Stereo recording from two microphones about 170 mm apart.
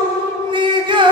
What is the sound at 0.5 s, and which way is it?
Music, 30° right (ahead or behind).